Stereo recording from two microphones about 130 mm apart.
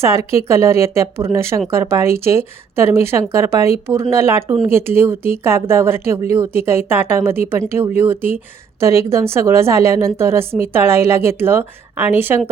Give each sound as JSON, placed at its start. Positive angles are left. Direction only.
{"t": 0.0, "sound": "a woman's voice", "side_deg": -20}